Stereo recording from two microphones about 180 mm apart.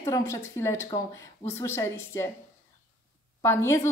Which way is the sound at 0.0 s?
15° left (ahead or behind).